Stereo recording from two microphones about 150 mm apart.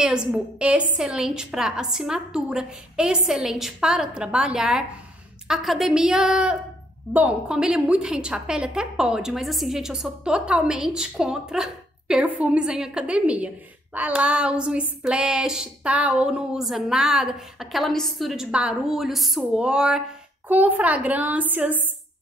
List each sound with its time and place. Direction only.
0.0 s a woman's voice: 5° right (ahead or behind)